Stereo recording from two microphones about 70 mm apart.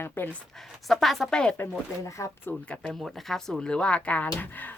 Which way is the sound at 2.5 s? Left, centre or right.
Left.